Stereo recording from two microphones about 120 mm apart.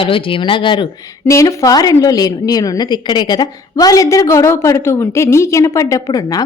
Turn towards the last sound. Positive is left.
turn(degrees=30)  # may be behind; listen again after turning